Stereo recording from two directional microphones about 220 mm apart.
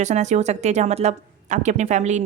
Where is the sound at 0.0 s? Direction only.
30° right (ahead or behind).